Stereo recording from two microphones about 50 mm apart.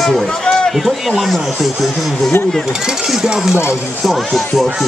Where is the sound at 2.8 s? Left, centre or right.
Centre.